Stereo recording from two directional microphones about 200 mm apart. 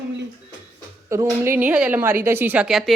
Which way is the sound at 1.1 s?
15° right (ahead or behind).